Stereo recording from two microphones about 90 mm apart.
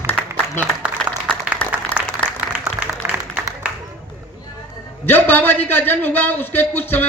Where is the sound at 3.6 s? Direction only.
15° right (ahead or behind).